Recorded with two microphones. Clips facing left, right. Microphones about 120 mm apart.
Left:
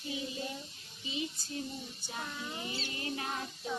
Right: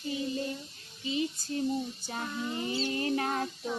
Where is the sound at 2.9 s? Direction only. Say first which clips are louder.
Right 8 dB; 50° right (ahead or behind).